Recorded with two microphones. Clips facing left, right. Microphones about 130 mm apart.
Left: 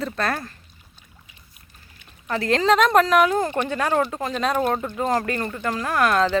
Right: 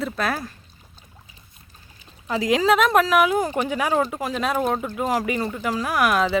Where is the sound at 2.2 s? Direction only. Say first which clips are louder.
Right 1 dB; 10° right (ahead or behind).